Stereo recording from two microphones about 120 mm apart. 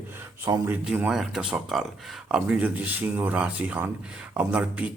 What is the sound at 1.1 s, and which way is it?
Speech, 5° right (ahead or behind).